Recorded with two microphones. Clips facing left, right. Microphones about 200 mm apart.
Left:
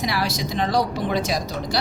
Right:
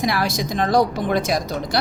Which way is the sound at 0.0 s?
50° right (ahead or behind).